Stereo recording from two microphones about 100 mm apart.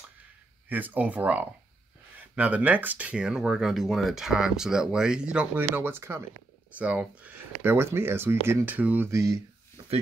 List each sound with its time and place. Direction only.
0.7 s speech: 15° right (ahead or behind)
5.6 s speech: 25° right (ahead or behind)
6.8 s speech: 15° right (ahead or behind)
9.1 s speech: 30° right (ahead or behind)